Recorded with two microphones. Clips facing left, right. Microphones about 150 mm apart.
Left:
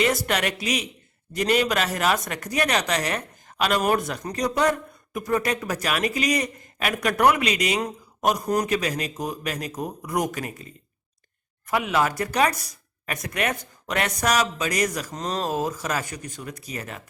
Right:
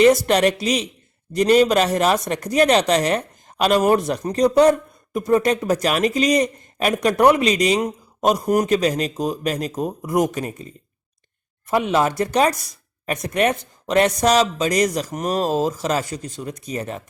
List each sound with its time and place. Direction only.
0.0 s a man's voice: 40° right (ahead or behind)
11.7 s a man's voice: 30° right (ahead or behind)
15.1 s speech: 20° right (ahead or behind)